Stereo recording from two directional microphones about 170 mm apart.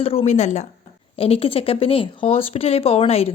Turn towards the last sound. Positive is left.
turn(degrees=35)  # may be behind; listen again after turning